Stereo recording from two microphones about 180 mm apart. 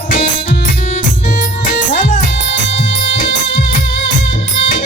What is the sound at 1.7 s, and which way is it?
Music, 50° left (ahead or behind).